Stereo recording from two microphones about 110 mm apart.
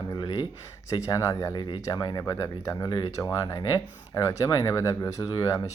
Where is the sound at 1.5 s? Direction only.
45° left (ahead or behind).